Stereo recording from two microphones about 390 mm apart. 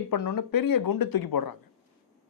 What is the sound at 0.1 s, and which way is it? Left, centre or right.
A man's voice, left.